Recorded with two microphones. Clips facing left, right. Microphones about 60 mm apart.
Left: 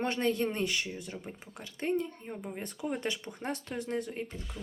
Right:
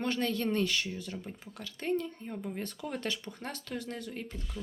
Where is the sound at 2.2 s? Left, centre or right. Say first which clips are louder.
Right 1 dB; centre.